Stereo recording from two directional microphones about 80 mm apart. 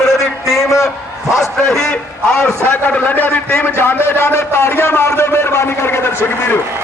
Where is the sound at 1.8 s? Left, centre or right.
Centre; by 6.6 s left.